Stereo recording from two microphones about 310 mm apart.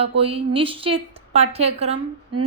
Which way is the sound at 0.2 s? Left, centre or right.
Centre.